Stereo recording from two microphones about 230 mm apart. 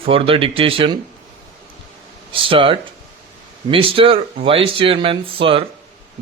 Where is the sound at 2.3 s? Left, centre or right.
Right.